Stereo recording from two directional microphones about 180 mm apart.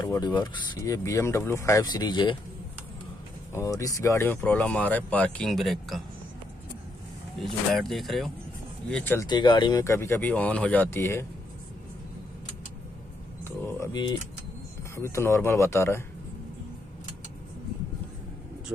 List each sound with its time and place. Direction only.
0.0 s speech: 20° left (ahead or behind)
3.5 s speech: 20° left (ahead or behind); by 6.0 s centre (ahead or behind)
7.3 s speech: centre (ahead or behind)
8.9 s speech: 10° left (ahead or behind)
9.3 s speech: 25° left (ahead or behind)
13.4 s a sound: 15° left (ahead or behind)
15.0 s speech: 15° left (ahead or behind)